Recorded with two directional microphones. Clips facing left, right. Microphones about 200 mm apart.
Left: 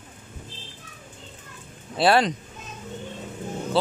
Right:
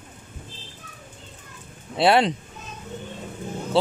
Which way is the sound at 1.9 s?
25° right (ahead or behind).